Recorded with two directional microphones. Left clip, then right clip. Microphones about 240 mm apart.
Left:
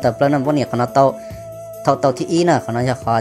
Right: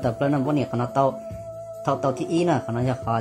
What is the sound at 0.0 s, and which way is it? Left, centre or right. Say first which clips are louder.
Speech: left 8 dB; centre.